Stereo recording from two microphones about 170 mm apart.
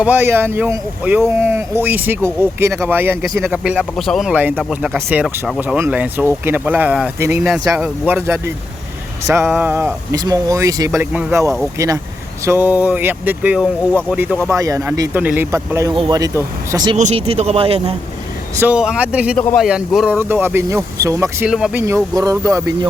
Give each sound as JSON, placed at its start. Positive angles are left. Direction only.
{"t": 0.0, "sound": "speech", "side_deg": -10}
{"t": 17.0, "sound": "speech", "side_deg": -40}
{"t": 18.6, "sound": "speech", "side_deg": -5}
{"t": 19.4, "sound": "a man's voice", "side_deg": 5}
{"t": 19.6, "sound": "a man's voice", "side_deg": -5}